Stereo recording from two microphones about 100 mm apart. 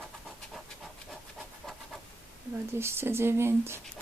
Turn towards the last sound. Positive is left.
turn(degrees=-25)  # may be behind; listen again after turning